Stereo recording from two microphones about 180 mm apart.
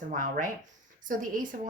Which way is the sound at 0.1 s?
45° right (ahead or behind).